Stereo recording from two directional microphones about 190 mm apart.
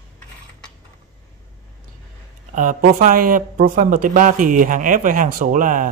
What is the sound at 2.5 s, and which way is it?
Speech, 45° right (ahead or behind).